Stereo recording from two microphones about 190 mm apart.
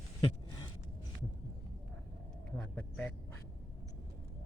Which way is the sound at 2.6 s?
5° left (ahead or behind).